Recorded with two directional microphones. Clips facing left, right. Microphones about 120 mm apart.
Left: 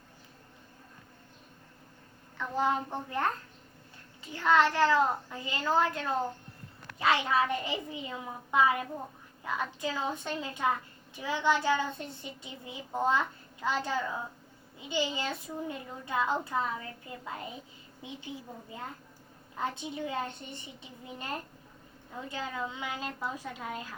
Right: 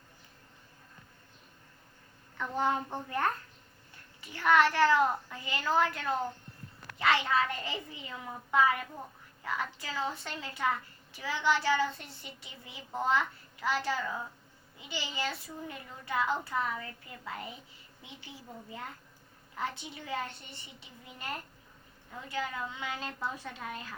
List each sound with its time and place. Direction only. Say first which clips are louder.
2.9 s a woman's voice: even; 20° left (ahead or behind)
19.5 s a woman's voice: left 3 dB; 20° left (ahead or behind)